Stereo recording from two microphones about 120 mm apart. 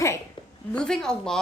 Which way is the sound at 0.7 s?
5° left (ahead or behind).